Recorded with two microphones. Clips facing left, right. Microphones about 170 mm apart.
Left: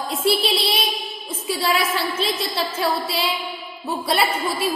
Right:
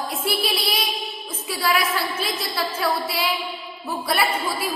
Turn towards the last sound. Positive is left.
turn(degrees=25)  # may be behind; listen again after turning